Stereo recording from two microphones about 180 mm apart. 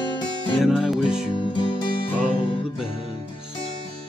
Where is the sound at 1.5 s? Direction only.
25° left (ahead or behind).